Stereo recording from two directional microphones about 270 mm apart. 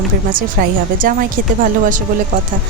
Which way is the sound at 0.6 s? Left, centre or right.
Right.